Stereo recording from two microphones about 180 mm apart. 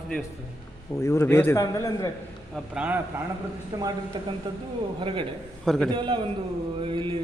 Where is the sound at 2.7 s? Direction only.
10° right (ahead or behind).